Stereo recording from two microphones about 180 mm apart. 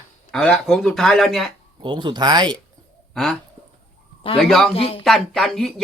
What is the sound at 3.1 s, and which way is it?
Speech, centre (ahead or behind).